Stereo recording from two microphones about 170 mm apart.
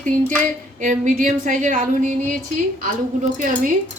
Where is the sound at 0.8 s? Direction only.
50° right (ahead or behind).